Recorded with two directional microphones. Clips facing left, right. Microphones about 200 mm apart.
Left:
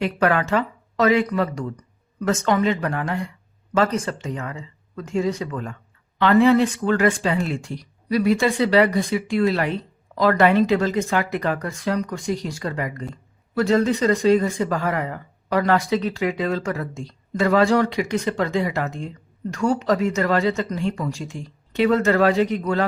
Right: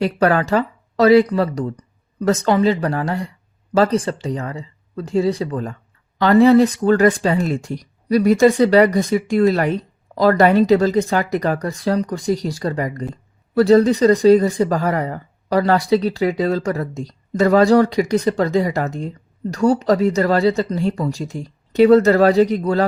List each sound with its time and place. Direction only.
0.0 s speech: 35° right (ahead or behind)